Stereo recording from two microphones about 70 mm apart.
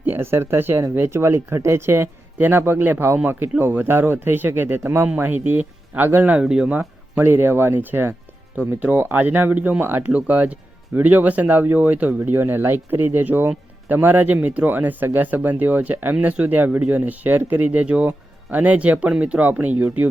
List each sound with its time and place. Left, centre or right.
0.0 s speech: right
6.3 s speech: centre
6.7 s speech: right